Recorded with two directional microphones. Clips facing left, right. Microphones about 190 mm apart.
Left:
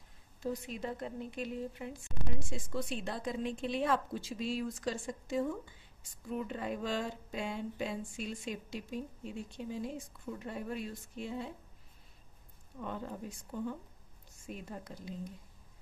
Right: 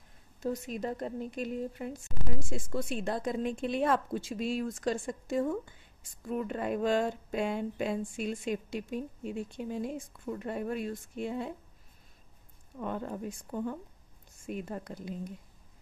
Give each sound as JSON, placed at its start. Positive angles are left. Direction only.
{"t": 0.4, "sound": "speech", "side_deg": -45}
{"t": 2.1, "sound": "a woman's voice", "side_deg": 0}
{"t": 2.5, "sound": "speech", "side_deg": -50}
{"t": 12.8, "sound": "speech", "side_deg": -55}